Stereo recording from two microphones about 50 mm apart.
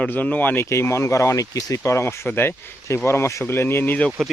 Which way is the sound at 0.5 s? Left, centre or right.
Left.